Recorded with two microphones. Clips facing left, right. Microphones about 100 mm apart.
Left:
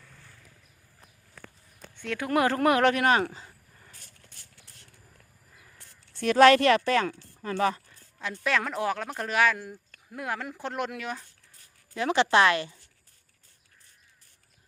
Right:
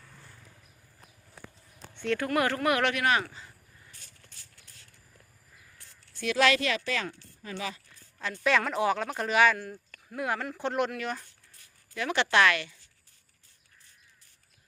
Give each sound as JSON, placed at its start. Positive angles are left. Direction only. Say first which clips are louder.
{"t": 2.0, "sound": "speech", "louder": "right 3 dB", "side_deg": 10}
{"t": 2.3, "sound": "speech", "louder": "left 5 dB", "side_deg": 25}
{"t": 6.1, "sound": "speech", "louder": "left 7 dB", "side_deg": 50}
{"t": 8.4, "sound": "speech", "louder": "right 2 dB", "side_deg": 0}
{"t": 11.9, "sound": "speech", "louder": "left 3 dB", "side_deg": 30}